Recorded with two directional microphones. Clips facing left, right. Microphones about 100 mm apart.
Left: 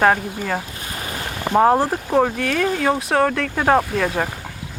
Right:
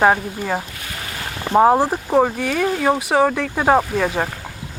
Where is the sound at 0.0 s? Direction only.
10° right (ahead or behind).